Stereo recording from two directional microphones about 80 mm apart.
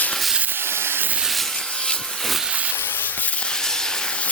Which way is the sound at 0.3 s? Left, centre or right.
Right.